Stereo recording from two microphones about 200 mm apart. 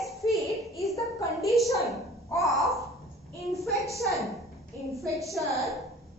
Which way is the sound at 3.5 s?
Centre (ahead or behind).